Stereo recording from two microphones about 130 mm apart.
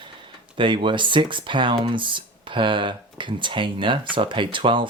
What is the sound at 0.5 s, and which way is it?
Speech, 40° right (ahead or behind).